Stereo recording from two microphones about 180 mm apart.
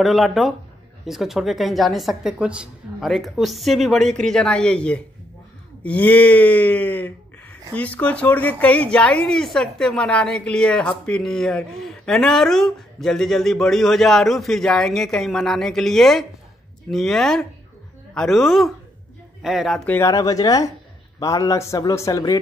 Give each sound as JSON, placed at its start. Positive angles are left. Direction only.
{"t": 0.0, "sound": "a woman's voice", "side_deg": 0}
{"t": 5.8, "sound": "a sound", "side_deg": 10}
{"t": 7.7, "sound": "a woman's voice", "side_deg": 10}